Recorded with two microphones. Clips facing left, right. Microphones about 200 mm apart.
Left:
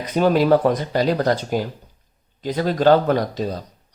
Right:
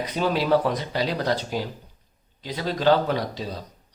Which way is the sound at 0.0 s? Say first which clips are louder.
Left 7 dB; 45° left (ahead or behind).